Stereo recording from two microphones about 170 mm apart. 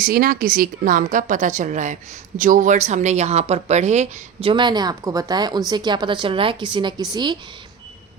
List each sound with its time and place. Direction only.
0.0 s a woman's voice: 60° right (ahead or behind); by 7.3 s 25° right (ahead or behind)